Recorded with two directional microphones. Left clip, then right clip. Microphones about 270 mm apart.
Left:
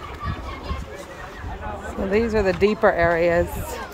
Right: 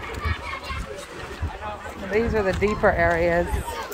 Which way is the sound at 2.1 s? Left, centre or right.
Centre.